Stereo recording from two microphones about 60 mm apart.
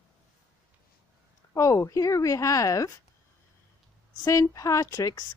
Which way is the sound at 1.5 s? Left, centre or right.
Left.